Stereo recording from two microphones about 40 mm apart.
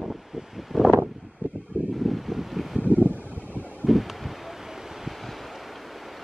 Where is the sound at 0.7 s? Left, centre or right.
Centre.